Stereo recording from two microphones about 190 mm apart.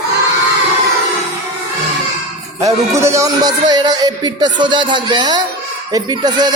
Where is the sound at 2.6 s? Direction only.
15° right (ahead or behind).